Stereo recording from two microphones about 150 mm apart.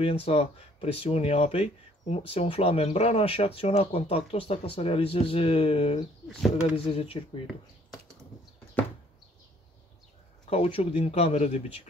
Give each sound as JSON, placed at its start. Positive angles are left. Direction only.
{"t": 0.0, "sound": "speech", "side_deg": 40}
{"t": 10.5, "sound": "speech", "side_deg": 40}